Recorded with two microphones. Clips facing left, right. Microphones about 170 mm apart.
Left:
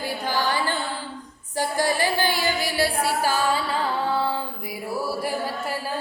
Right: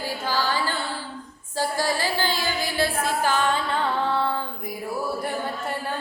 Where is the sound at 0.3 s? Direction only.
15° left (ahead or behind).